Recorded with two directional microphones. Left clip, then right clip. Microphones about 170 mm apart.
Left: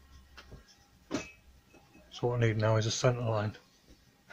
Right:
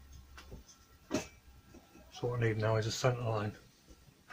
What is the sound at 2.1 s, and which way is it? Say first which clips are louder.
Speech: left 4 dB; 45° left (ahead or behind).